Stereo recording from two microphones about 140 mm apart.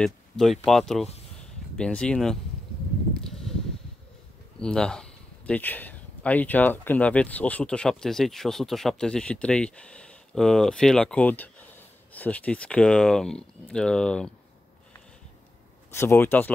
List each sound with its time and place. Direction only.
0.0 s speech: centre (ahead or behind)
3.3 s a sound: 5° left (ahead or behind)
4.6 s speech: 5° left (ahead or behind)
15.9 s speech: 15° left (ahead or behind)